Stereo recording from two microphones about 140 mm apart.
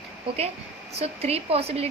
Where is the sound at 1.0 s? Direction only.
45° right (ahead or behind).